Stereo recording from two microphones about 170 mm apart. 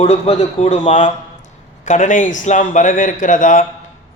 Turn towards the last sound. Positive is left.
turn(degrees=50)  # may be behind; listen again after turning